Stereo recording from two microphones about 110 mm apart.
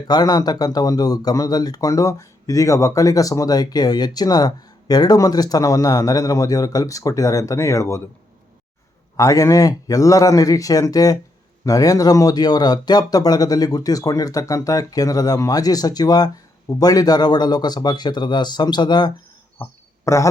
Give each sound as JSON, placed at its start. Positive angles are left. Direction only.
{"t": 0.1, "sound": "speech", "side_deg": 35}
{"t": 9.1, "sound": "speech", "side_deg": 30}
{"t": 19.6, "sound": "a man's voice", "side_deg": 25}